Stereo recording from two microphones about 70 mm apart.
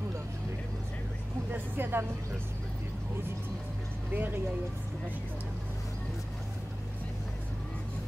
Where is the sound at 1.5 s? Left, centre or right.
Right.